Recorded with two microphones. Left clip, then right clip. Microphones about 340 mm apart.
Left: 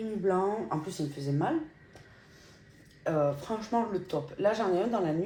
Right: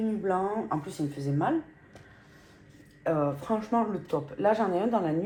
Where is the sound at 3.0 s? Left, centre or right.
Centre.